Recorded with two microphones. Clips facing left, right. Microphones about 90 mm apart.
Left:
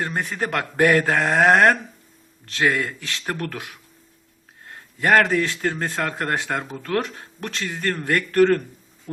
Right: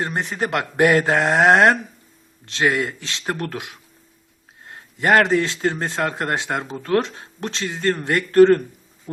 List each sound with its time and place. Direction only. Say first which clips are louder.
0.0 s a man's voice: right 2 dB; 20° right (ahead or behind)